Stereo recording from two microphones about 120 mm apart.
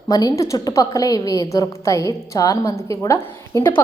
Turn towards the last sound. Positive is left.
turn(degrees=20)  # may be behind; listen again after turning